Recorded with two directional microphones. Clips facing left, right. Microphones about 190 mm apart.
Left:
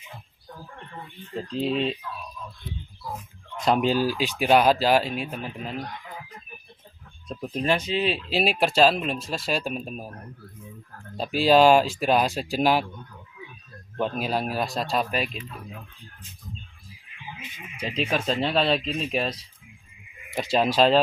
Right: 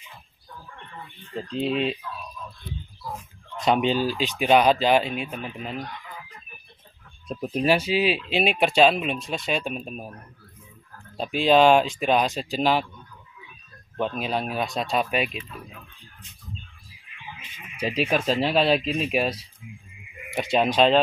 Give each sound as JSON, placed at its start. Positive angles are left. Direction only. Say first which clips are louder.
{"t": 1.3, "sound": "speech", "louder": "even", "side_deg": 0}
{"t": 3.1, "sound": "speech", "louder": "even", "side_deg": 0}
{"t": 7.2, "sound": "speech", "louder": "right 3 dB", "side_deg": -5}
{"t": 11.1, "sound": "speech", "louder": "even", "side_deg": 5}
{"t": 13.9, "sound": "speech", "louder": "even", "side_deg": 5}
{"t": 17.7, "sound": "speech", "louder": "right 3 dB", "side_deg": -10}
{"t": 20.3, "sound": "speech", "louder": "right 1 dB", "side_deg": 0}